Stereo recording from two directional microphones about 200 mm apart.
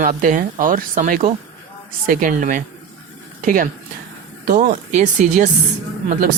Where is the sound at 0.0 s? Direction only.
40° right (ahead or behind).